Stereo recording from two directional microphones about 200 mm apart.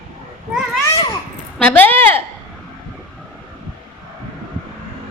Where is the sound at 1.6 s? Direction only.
5° left (ahead or behind).